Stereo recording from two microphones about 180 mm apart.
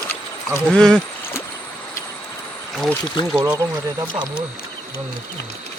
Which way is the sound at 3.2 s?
25° left (ahead or behind).